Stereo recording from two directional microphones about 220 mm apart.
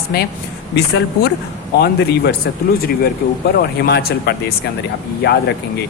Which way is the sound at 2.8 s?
45° left (ahead or behind).